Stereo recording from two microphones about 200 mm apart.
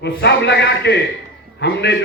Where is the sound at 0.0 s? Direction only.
55° left (ahead or behind).